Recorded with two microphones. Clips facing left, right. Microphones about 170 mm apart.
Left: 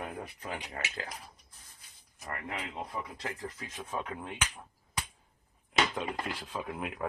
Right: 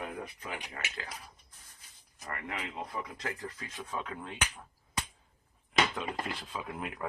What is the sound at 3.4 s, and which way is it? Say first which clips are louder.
Speech: left 1 dB; 20° left (ahead or behind).